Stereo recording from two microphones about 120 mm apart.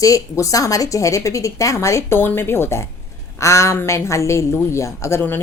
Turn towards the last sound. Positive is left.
turn(degrees=20)  # may be behind; listen again after turning